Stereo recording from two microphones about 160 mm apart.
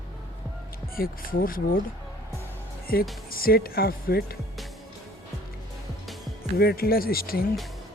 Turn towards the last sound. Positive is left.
turn(degrees=70)  # may be behind; listen again after turning